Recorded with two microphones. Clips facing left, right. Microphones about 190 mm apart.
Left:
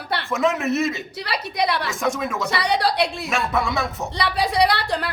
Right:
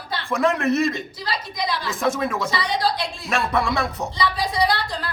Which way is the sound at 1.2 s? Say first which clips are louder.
Left 5 dB; 65° left (ahead or behind).